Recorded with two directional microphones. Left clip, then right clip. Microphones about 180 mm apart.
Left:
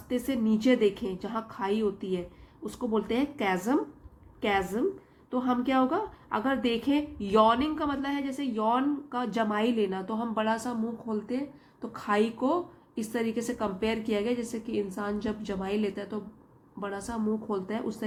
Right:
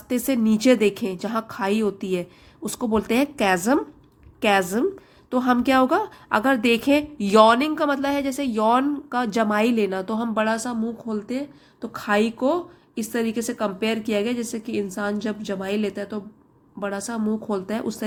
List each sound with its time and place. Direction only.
0.1 s a woman's voice: 40° right (ahead or behind)